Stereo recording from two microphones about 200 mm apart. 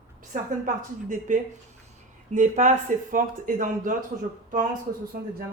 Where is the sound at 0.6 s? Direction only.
40° right (ahead or behind).